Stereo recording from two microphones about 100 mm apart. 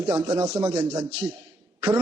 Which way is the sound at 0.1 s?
35° right (ahead or behind).